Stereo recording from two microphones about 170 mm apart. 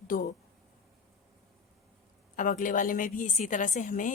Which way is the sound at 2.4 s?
50° left (ahead or behind).